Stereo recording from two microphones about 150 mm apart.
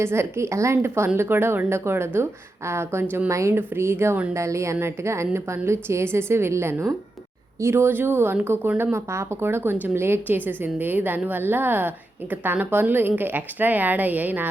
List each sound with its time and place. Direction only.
0.0 s a woman's voice: 15° right (ahead or behind)